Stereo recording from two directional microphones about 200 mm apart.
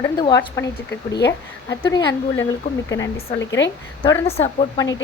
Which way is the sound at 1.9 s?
20° left (ahead or behind).